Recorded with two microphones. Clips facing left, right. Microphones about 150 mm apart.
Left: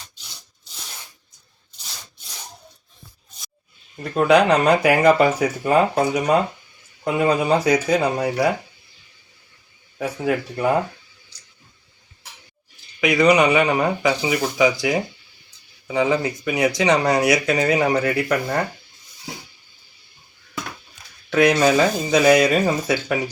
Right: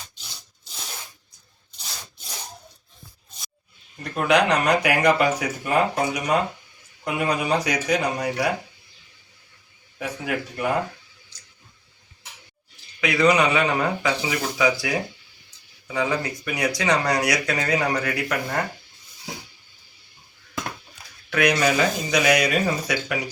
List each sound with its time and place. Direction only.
4.1 s speech: 30° left (ahead or behind)
10.0 s speech: 30° left (ahead or behind)
13.0 s speech: 20° left (ahead or behind)
21.2 s speech: 25° left (ahead or behind)